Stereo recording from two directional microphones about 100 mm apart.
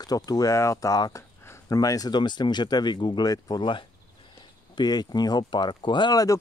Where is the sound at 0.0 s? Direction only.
40° left (ahead or behind).